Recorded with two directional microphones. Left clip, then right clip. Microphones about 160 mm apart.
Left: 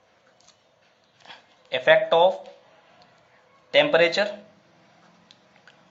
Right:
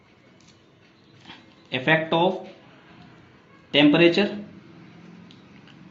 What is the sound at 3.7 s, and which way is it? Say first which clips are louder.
Speech: right 1 dB; 30° left (ahead or behind).